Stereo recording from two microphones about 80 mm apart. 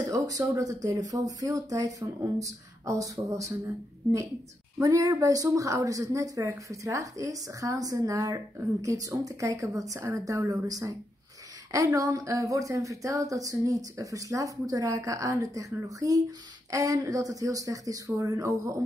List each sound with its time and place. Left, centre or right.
0.1 s a woman's voice: right